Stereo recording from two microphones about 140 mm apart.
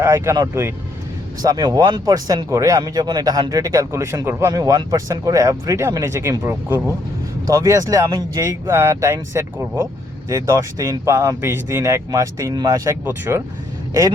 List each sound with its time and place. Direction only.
0.0 s speech: 20° right (ahead or behind)